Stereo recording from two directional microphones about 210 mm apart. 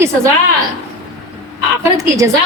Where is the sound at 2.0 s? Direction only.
15° right (ahead or behind).